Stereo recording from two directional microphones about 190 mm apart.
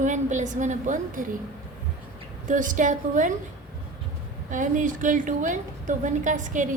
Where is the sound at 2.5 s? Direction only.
45° right (ahead or behind).